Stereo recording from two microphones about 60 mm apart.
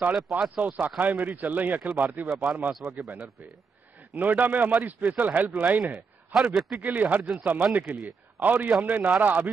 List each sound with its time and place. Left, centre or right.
0.3 s speech: right
4.2 s speech: right
6.5 s a man's voice: centre
6.8 s speech: right